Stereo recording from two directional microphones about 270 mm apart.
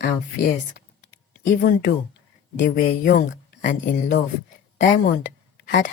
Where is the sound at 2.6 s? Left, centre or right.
Left.